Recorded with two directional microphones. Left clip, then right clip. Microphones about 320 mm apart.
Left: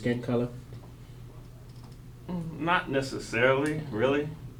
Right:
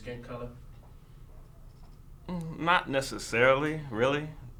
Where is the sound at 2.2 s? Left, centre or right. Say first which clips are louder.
Right 2 dB; right.